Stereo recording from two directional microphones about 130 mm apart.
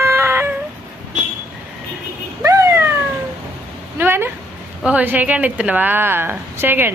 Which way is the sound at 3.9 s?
15° right (ahead or behind).